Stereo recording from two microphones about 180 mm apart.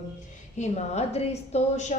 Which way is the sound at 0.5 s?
40° left (ahead or behind).